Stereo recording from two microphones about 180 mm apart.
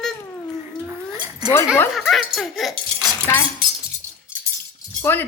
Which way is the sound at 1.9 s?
Centre (ahead or behind).